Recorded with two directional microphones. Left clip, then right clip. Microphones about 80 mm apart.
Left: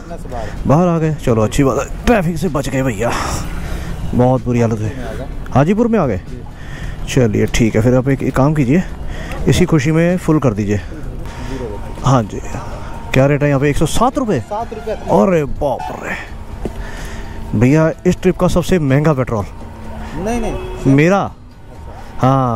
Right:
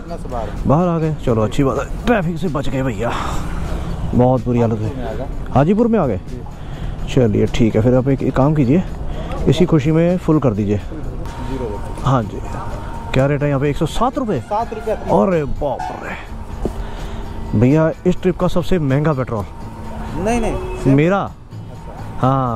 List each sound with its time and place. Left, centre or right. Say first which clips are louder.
0.3 s speech: left 2 dB; left
11.4 s a sound: right 1 dB; left
13.1 s speech: left 4 dB; left
17.6 s speech: left 2 dB; left